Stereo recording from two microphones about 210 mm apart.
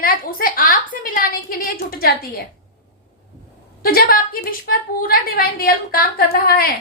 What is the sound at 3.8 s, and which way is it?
A woman's voice, 45° left (ahead or behind).